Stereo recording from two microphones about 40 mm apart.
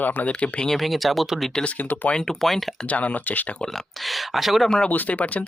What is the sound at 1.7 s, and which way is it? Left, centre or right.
Speech, left.